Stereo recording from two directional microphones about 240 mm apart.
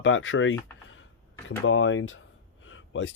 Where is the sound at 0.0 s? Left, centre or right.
Left.